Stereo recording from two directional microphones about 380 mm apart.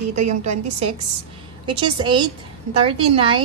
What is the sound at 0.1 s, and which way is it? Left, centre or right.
A woman's voice, centre.